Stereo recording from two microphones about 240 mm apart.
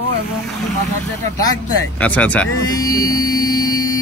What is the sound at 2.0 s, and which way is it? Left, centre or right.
Speech, centre.